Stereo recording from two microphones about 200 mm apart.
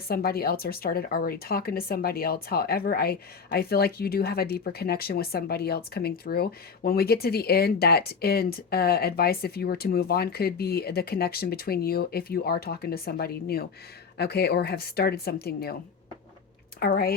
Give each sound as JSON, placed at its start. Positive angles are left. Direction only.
{"t": 0.1, "sound": "speech", "side_deg": 50}
{"t": 16.8, "sound": "speech", "side_deg": 50}